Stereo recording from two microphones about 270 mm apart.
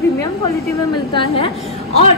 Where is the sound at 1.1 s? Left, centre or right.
Centre.